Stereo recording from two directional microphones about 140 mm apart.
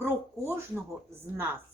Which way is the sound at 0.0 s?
15° right (ahead or behind).